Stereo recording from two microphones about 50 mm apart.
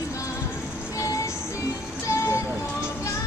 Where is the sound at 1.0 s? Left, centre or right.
Left.